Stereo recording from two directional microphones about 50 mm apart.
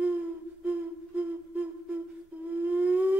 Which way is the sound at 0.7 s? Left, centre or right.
Right.